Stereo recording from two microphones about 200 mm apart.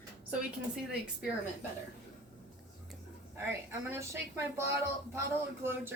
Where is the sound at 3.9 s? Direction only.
15° right (ahead or behind).